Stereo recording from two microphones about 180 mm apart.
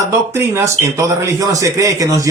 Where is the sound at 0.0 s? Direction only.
15° right (ahead or behind).